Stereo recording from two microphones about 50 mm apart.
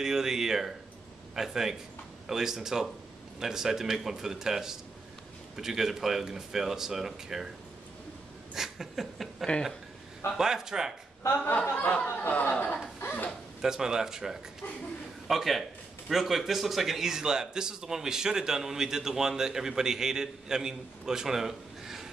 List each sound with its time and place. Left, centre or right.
0.0 s speech: centre
8.5 s a sound: centre
10.3 s speech: centre
11.4 s speech: left
13.6 s a man's voice: centre